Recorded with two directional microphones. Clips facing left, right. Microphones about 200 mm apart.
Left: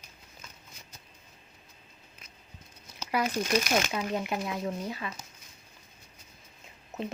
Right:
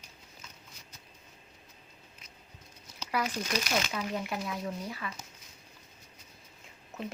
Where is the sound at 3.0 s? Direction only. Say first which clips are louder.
Left 3 dB; 50° left (ahead or behind).